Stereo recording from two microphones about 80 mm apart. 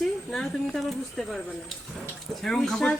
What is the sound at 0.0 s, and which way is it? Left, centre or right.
Speech, centre.